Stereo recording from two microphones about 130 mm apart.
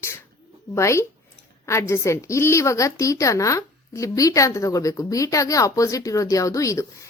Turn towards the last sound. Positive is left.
turn(degrees=25)  # may be behind; listen again after turning